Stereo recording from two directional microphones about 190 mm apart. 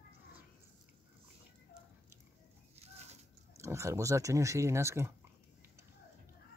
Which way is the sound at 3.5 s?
15° right (ahead or behind).